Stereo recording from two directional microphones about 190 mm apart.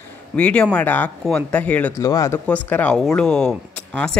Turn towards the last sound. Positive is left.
turn(degrees=5)  # may be behind; listen again after turning